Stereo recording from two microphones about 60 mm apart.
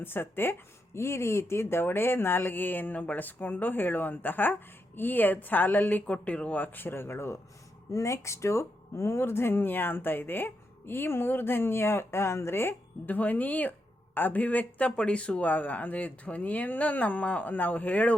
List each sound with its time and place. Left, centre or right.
0.0 s speech: left
0.9 s speech: left
7.9 s speech: left
13.1 s speech: left
14.8 s speech: centre